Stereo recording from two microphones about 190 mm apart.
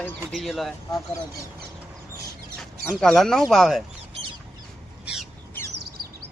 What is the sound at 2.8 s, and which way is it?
Speech, 5° left (ahead or behind).